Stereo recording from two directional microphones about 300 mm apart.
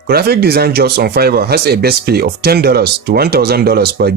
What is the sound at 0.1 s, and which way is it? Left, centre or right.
Speech, right.